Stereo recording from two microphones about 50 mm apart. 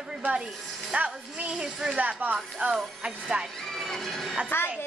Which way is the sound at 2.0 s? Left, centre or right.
Right.